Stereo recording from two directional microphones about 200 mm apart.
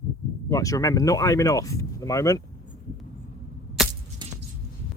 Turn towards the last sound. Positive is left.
turn(degrees=-20)  # may be behind; listen again after turning